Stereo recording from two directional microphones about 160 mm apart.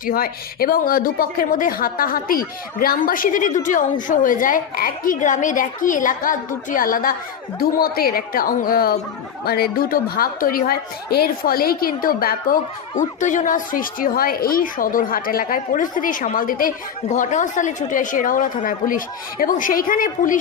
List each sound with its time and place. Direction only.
0.0 s a woman's voice: 65° left (ahead or behind)
13.0 s speech: 50° left (ahead or behind)